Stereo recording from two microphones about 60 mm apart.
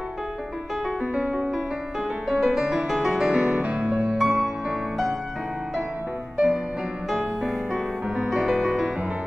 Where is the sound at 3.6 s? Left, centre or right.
Right.